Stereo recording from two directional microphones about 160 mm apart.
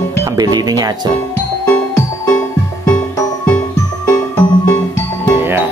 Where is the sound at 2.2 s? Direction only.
20° left (ahead or behind).